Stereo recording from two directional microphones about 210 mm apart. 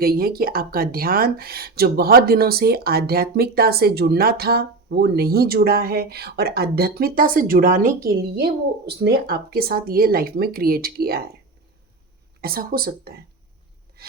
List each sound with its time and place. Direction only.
0.0 s speech: 45° right (ahead or behind)
12.4 s speech: 45° right (ahead or behind)